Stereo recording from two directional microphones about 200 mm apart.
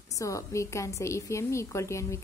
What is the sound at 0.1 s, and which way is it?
A woman's voice, 15° left (ahead or behind).